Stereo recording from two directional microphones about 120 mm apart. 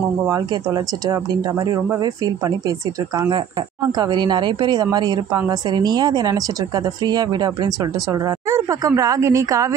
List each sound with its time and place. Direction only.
0.3 s a woman's voice: 35° right (ahead or behind)
3.9 s a woman's voice: 40° right (ahead or behind)